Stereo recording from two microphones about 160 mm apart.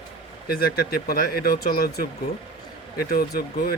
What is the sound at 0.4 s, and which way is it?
Speech, 70° left (ahead or behind).